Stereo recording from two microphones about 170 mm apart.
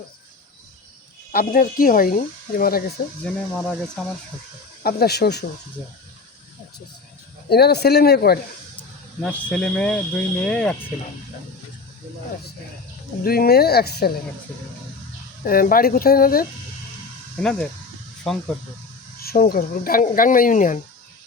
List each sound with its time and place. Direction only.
1.3 s speech: 60° left (ahead or behind)
3.2 s speech: 5° left (ahead or behind)
4.8 s speech: 65° left (ahead or behind)
7.5 s speech: 70° left (ahead or behind)
9.2 s speech: 10° left (ahead or behind)
13.2 s speech: 60° left (ahead or behind)
15.4 s speech: 60° left (ahead or behind)
17.4 s speech: 5° left (ahead or behind)
19.2 s speech: 60° left (ahead or behind)